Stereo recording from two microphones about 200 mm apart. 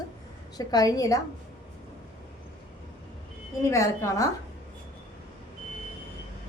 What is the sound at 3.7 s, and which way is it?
Speech, 15° left (ahead or behind).